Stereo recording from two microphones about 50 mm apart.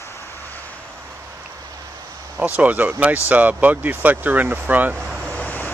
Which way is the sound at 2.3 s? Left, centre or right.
Right.